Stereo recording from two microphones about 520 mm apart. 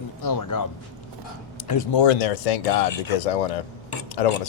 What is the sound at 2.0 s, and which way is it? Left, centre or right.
Speech, left.